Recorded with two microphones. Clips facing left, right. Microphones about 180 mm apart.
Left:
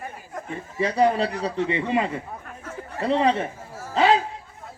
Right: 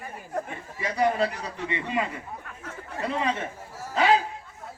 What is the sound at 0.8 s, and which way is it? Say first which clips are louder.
A man's voice: left 4 dB; 30° left (ahead or behind).